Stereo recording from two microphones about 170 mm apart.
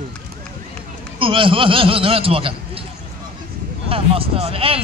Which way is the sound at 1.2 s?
30° right (ahead or behind).